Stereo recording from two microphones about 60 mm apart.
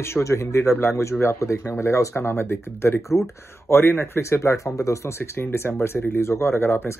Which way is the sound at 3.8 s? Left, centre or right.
Left.